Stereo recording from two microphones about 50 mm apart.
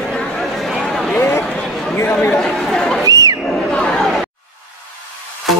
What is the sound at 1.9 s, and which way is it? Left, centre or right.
Chatter, left.